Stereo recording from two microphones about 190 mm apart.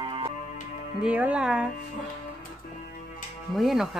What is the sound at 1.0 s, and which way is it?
Speech, 5° right (ahead or behind).